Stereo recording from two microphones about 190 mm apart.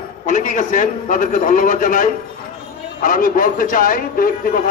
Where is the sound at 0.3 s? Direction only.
40° left (ahead or behind).